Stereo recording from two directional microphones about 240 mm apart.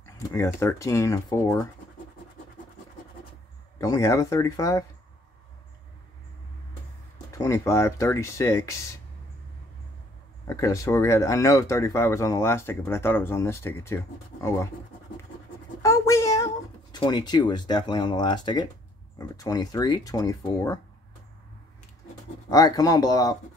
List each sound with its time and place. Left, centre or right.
0.0 s speech: centre
3.7 s speech: centre
7.3 s speech: centre
10.4 s speech: centre
15.8 s speech: centre
22.5 s speech: centre